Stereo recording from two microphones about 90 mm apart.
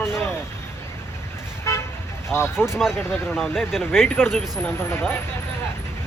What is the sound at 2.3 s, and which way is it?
Speech, 10° right (ahead or behind).